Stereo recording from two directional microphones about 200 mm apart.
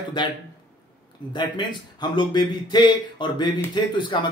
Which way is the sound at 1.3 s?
20° left (ahead or behind).